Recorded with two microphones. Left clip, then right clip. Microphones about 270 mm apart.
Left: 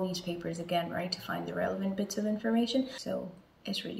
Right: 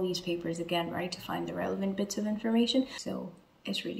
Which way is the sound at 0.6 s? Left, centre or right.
Right.